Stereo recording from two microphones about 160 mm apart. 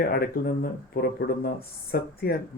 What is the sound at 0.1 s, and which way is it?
Speech, 65° left (ahead or behind).